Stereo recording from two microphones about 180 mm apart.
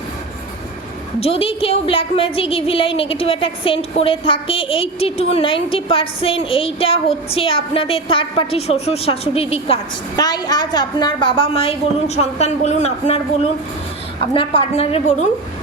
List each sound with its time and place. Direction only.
1.2 s speech: 30° left (ahead or behind)